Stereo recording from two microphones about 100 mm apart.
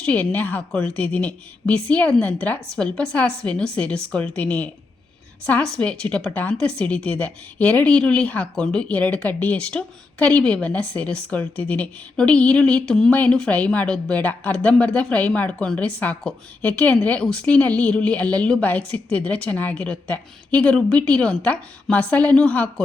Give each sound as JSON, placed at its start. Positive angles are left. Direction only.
{"t": 0.0, "sound": "a woman's voice", "side_deg": 15}